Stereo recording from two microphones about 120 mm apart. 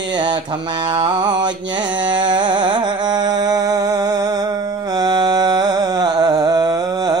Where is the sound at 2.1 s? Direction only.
40° right (ahead or behind).